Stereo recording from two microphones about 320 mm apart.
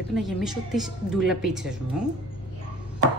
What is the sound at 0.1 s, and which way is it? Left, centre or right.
A woman's voice, centre.